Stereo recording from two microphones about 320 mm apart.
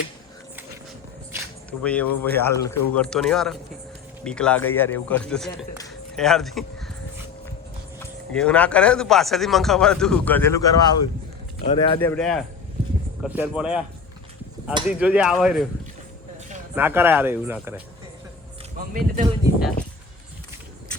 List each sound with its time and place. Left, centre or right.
1.8 s speech: centre
7.9 s speech: centre
11.9 s speech: centre
14.8 s speech: centre
16.7 s speech: centre
18.8 s speech: right